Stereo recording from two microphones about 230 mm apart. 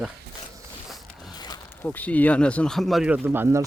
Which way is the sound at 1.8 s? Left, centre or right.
Centre.